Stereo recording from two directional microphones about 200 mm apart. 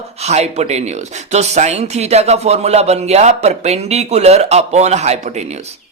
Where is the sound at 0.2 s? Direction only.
35° right (ahead or behind).